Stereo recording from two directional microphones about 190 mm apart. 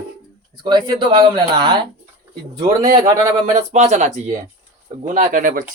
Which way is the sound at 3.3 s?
35° right (ahead or behind).